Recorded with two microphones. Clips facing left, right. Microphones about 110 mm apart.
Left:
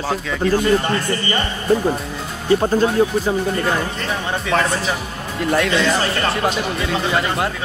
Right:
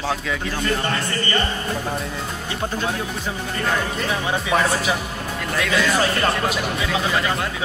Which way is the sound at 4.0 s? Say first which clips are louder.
Even; 10° right (ahead or behind).